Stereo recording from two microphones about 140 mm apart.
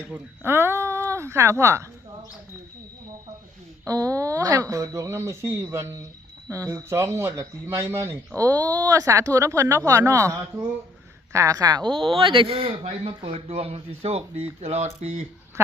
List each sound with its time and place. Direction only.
0.1 s speech: 15° right (ahead or behind)
3.8 s speech: 25° right (ahead or behind); by 15.2 s 55° right (ahead or behind)